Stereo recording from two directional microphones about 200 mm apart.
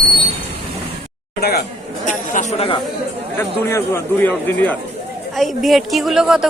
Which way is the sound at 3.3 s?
10° left (ahead or behind).